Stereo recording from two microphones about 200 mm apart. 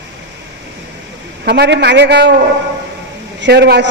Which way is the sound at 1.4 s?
55° right (ahead or behind).